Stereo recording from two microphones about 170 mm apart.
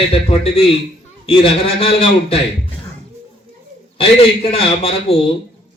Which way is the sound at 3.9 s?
35° left (ahead or behind).